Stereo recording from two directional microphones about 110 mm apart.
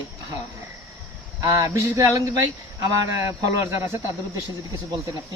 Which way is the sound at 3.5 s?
25° right (ahead or behind).